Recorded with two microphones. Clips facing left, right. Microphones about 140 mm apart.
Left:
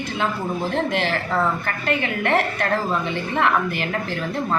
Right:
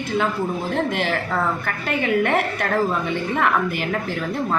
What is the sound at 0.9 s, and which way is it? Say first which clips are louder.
A woman's voice: even; 10° right (ahead or behind).